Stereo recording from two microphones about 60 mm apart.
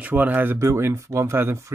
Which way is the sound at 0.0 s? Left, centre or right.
Right.